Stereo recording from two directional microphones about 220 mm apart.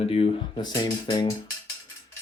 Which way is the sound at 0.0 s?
25° left (ahead or behind).